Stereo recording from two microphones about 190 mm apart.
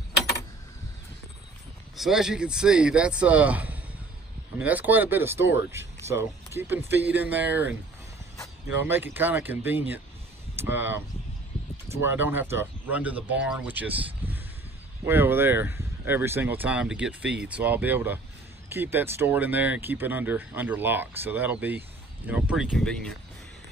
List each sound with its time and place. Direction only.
2.0 s speech: centre (ahead or behind)
8.8 s speech: 10° right (ahead or behind)
12.1 s speech: 10° right (ahead or behind)